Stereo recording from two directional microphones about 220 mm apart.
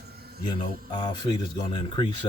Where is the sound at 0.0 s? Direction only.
45° right (ahead or behind).